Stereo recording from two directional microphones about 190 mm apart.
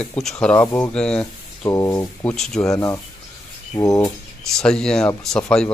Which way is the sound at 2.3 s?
Centre (ahead or behind).